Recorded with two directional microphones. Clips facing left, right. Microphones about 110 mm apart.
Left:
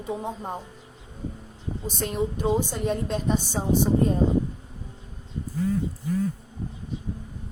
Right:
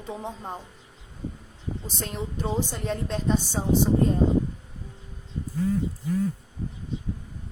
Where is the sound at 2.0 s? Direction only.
15° left (ahead or behind).